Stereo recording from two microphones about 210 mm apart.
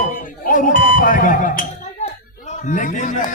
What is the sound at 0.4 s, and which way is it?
Music, 40° left (ahead or behind).